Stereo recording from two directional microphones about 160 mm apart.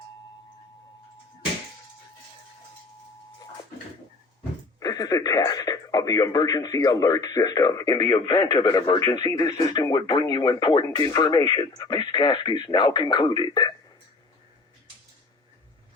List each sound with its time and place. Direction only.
4.8 s speech: 25° left (ahead or behind)